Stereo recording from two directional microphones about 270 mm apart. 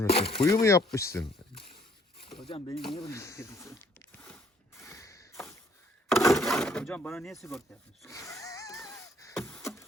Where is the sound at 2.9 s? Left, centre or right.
Centre.